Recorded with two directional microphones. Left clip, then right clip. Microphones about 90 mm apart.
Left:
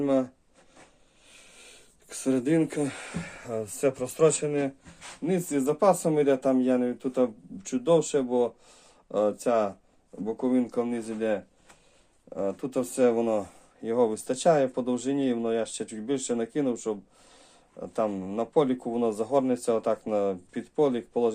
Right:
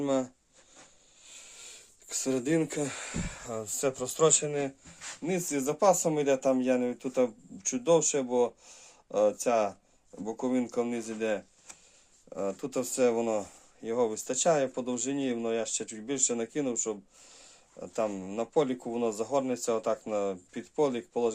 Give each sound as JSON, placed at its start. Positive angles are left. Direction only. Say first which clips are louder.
{"t": 0.0, "sound": "speech", "louder": "left 4 dB", "side_deg": -20}
{"t": 1.3, "sound": "speech", "louder": "right 2 dB", "side_deg": -25}